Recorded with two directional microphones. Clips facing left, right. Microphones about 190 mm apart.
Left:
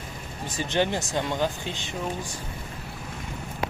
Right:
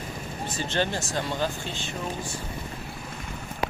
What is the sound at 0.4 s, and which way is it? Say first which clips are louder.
Speech: left 3 dB; 15° left (ahead or behind).